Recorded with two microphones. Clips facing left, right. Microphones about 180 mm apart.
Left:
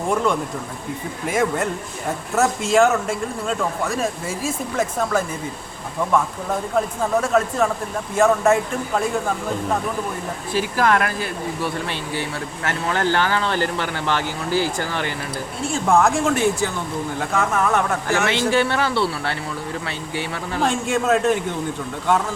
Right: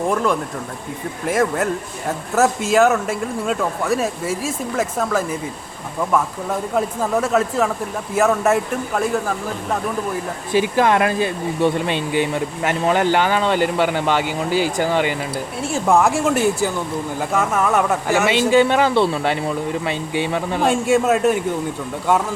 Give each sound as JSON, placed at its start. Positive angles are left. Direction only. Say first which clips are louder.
{"t": 1.3, "sound": "speech", "louder": "right 2 dB", "side_deg": 0}
{"t": 6.7, "sound": "speech", "louder": "right 1 dB", "side_deg": -5}
{"t": 10.5, "sound": "speech", "louder": "right 3 dB", "side_deg": -20}
{"t": 20.7, "sound": "speech", "louder": "right 4 dB", "side_deg": -5}